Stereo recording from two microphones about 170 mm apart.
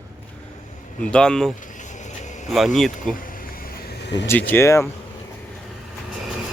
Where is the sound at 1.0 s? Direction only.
5° left (ahead or behind).